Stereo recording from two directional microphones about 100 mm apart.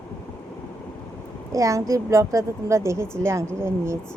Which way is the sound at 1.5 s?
35° right (ahead or behind).